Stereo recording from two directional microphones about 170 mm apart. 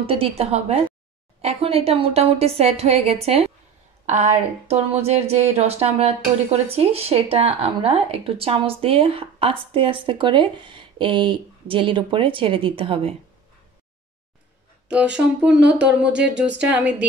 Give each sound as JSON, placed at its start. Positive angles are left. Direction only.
{"t": 0.0, "sound": "speech", "side_deg": -35}
{"t": 14.9, "sound": "speech", "side_deg": -5}